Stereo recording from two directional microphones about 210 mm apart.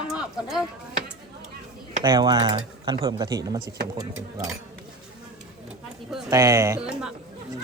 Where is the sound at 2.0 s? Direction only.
20° right (ahead or behind).